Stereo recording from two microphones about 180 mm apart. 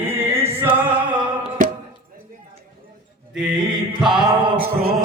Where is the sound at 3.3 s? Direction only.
5° right (ahead or behind).